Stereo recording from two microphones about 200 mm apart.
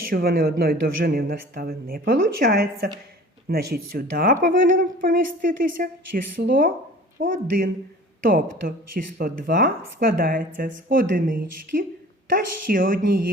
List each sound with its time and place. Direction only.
0.1 s speech: 50° right (ahead or behind)